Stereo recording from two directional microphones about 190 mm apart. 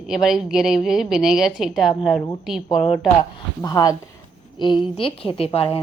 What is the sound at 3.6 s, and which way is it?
A woman's voice, 20° left (ahead or behind).